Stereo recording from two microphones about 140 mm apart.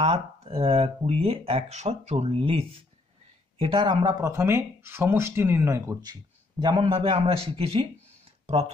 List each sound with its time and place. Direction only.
0.0 s a man's voice: 45° right (ahead or behind)